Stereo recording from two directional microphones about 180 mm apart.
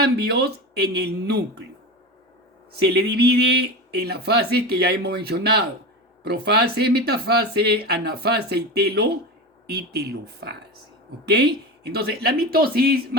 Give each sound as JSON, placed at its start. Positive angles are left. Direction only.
{"t": 0.0, "sound": "speech", "side_deg": -65}
{"t": 2.7, "sound": "speech", "side_deg": -65}